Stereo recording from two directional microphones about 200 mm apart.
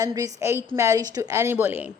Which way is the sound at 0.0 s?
15° right (ahead or behind).